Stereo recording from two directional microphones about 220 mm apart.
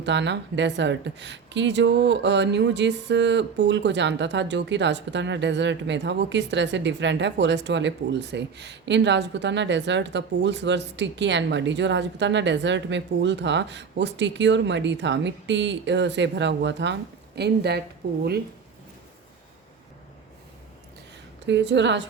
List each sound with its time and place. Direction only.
0.0 s a woman's voice: 55° right (ahead or behind)
21.4 s a woman's voice: 55° right (ahead or behind)